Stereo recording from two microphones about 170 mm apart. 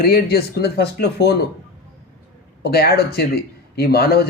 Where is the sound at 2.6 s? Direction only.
70° left (ahead or behind).